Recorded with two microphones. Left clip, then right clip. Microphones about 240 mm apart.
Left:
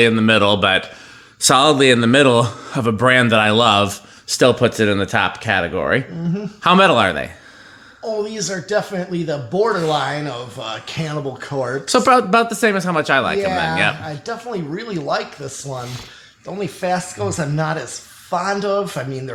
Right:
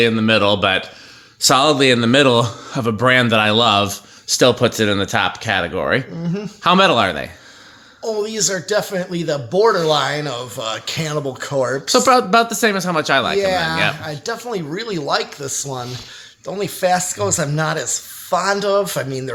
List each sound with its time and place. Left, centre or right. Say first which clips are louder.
0.0 s speech: left 1 dB; centre
8.0 s speech: right 2 dB; right
11.9 s speech: left 1 dB; centre
13.4 s speech: even; right